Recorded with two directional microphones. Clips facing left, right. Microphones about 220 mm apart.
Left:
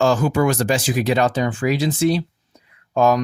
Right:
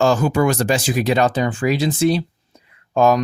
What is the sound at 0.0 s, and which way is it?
Speech, 40° right (ahead or behind).